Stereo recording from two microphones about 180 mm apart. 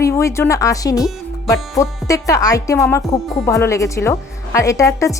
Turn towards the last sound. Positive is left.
turn(degrees=15)  # may be behind; listen again after turning